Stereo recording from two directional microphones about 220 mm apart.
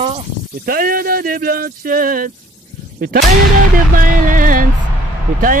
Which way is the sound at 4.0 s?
40° right (ahead or behind).